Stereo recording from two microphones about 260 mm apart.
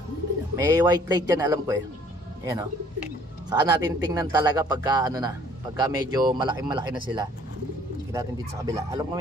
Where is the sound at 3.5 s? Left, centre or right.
Centre.